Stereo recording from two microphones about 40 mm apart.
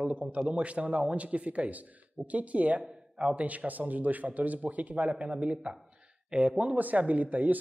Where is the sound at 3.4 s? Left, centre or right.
Right.